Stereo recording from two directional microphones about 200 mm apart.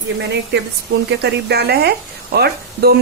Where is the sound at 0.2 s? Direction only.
55° right (ahead or behind).